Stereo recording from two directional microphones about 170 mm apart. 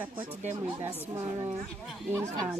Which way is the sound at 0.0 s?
10° right (ahead or behind).